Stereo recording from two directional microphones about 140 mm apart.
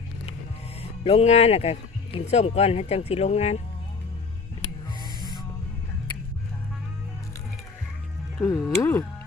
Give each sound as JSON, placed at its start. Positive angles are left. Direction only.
{"t": 0.8, "sound": "speech", "side_deg": 45}
{"t": 8.4, "sound": "speech", "side_deg": 25}